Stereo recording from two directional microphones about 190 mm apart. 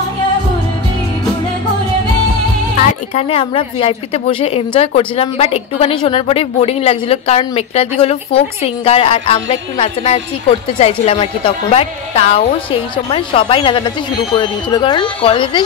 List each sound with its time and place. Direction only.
2.8 s a woman's voice: 30° left (ahead or behind)